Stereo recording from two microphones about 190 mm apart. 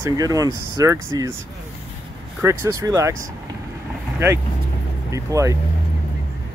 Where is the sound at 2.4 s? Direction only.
15° right (ahead or behind).